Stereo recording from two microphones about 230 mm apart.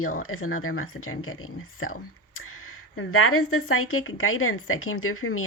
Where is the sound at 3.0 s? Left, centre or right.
Left.